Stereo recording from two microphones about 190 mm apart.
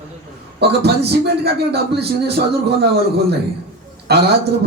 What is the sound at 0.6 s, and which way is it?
A man's voice, 60° right (ahead or behind).